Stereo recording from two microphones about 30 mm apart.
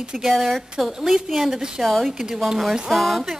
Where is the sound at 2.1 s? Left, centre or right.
Centre.